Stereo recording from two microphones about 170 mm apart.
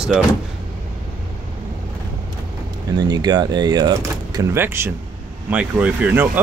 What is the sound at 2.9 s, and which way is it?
Speech, 25° right (ahead or behind).